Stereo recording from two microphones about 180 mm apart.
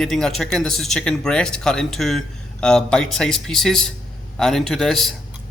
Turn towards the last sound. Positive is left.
turn(degrees=0)  # may be behind; listen again after turning